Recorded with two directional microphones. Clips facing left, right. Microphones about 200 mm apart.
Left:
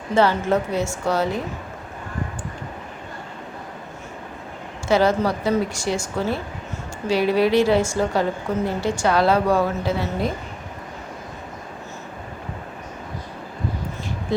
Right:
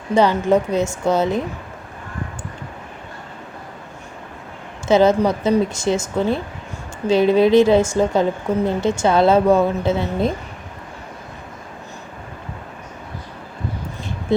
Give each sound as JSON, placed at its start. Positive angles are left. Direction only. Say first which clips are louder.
{"t": 0.1, "sound": "a woman's voice", "louder": "right 3 dB", "side_deg": -15}
{"t": 4.9, "sound": "a woman's voice", "louder": "right 4 dB", "side_deg": -20}